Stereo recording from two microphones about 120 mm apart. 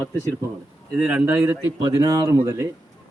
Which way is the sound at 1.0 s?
10° right (ahead or behind).